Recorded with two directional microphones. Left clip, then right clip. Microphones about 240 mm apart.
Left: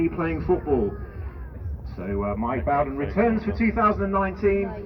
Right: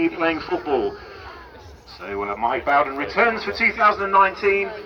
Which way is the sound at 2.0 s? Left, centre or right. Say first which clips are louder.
Right 4 dB; right.